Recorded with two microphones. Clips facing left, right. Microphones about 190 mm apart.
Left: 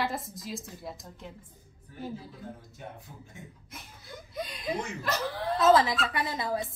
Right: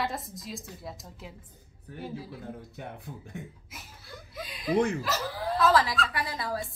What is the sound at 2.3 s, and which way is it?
A man's voice, 65° right (ahead or behind).